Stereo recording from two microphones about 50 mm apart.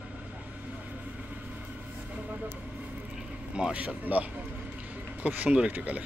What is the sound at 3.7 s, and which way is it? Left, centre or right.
Speech, right.